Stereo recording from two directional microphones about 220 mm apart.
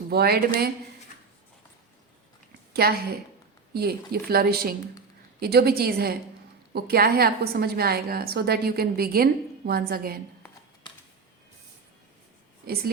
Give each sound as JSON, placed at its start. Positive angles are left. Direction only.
{"t": 0.1, "sound": "a woman's voice", "side_deg": -45}
{"t": 2.7, "sound": "a woman's voice", "side_deg": -45}